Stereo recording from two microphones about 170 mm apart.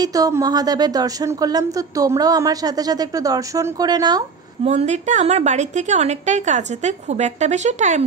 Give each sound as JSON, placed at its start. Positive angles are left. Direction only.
{"t": 0.0, "sound": "speech", "side_deg": -20}
{"t": 4.6, "sound": "a woman's voice", "side_deg": -40}